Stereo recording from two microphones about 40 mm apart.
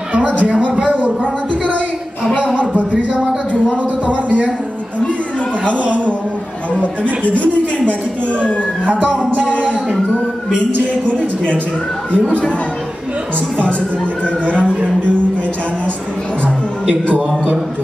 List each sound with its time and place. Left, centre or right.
0.1 s speech: right
2.3 s speech: left
2.7 s a sound: right
7.0 s music: right
9.4 s speech: left
10.7 s music: right
14.6 s music: right